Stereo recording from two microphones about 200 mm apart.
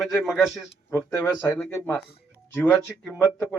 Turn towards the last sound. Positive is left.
turn(degrees=15)  # may be behind; listen again after turning